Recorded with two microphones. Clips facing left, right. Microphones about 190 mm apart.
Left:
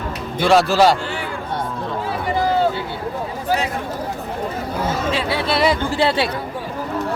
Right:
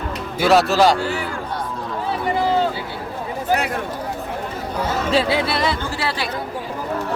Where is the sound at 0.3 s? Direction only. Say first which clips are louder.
Left 1 dB; centre (ahead or behind).